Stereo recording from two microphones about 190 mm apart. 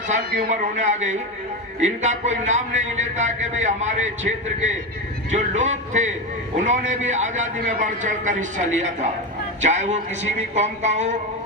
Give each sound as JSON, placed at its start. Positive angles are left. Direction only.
{"t": 0.1, "sound": "speech", "side_deg": -40}